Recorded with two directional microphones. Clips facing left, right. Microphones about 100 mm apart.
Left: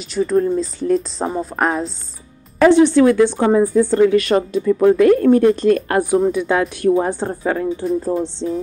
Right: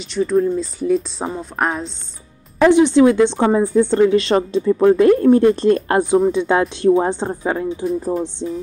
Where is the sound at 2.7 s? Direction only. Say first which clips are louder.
Right 1 dB; 20° right (ahead or behind).